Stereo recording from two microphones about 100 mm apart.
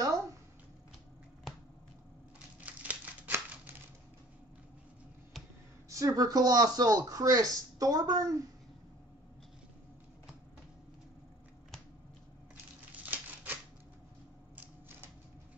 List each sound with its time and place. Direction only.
2.6 s crumpling: 15° right (ahead or behind)
5.9 s speech: 35° right (ahead or behind)
13.0 s typewriter: 15° right (ahead or behind)
14.5 s a sound: 20° right (ahead or behind)